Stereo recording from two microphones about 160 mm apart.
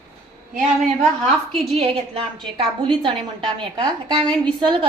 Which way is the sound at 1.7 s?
35° right (ahead or behind).